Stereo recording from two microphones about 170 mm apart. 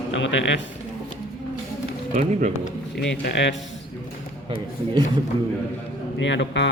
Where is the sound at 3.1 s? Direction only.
90° left.